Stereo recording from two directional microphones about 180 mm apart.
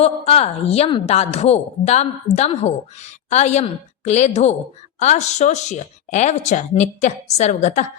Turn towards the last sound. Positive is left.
turn(degrees=40)  # may be behind; listen again after turning